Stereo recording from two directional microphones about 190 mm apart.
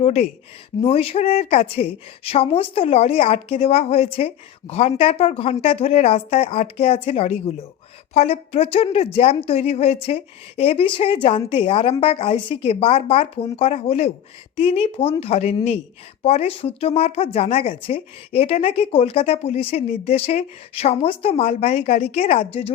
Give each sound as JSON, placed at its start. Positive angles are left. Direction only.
{"t": 0.0, "sound": "a woman's voice", "side_deg": 35}